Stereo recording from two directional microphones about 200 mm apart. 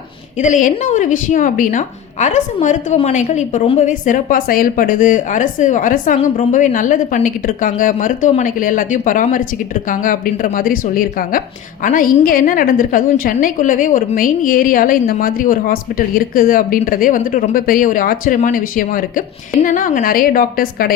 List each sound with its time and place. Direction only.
0.4 s a woman's voice: 40° left (ahead or behind)